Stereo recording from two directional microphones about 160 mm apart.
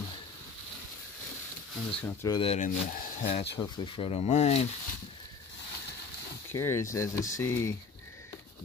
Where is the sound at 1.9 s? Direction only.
5° left (ahead or behind).